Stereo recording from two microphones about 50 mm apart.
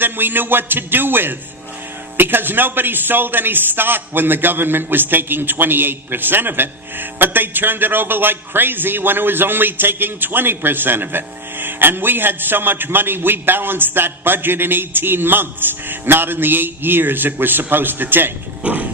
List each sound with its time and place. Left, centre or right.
0.0 s a man's voice: right
18.6 s roaring cats: right